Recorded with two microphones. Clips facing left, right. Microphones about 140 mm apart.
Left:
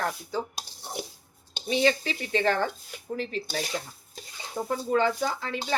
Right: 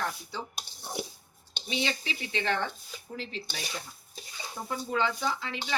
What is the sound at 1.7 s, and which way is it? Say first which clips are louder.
Speech: left 8 dB; 45° left (ahead or behind).